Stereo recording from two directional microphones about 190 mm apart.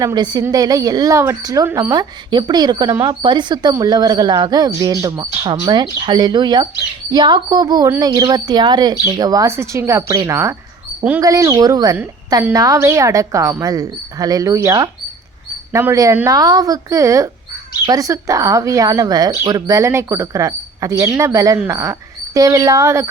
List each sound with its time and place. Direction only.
0.0 s speech: 20° right (ahead or behind)